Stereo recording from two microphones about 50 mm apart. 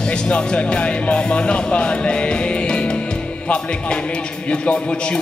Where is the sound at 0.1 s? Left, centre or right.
Centre.